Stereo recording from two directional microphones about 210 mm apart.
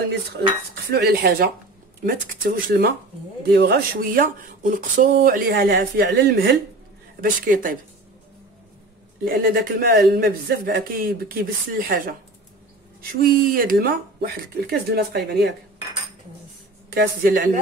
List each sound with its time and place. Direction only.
0.8 s speech: 50° right (ahead or behind)
9.2 s speech: 45° right (ahead or behind)
13.2 s speech: 40° right (ahead or behind)
16.9 s speech: 45° right (ahead or behind)